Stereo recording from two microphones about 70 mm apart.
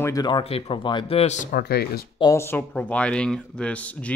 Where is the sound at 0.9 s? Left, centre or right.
Left.